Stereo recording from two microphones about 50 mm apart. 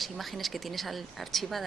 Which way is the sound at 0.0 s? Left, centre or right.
Centre.